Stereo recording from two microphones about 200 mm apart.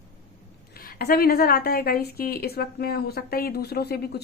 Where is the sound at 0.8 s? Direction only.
50° left (ahead or behind).